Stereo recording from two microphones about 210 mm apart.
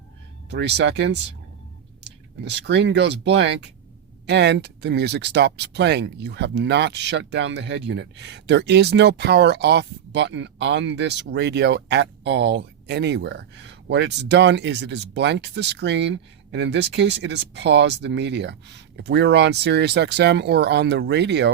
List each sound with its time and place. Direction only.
0.5 s speech: 55° right (ahead or behind)